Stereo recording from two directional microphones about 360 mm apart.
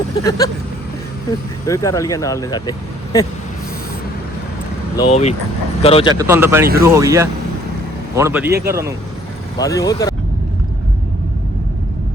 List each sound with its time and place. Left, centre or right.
0.3 s speech: centre
1.6 s speech: centre
4.9 s speech: centre
6.1 s speech: centre
9.6 s speech: centre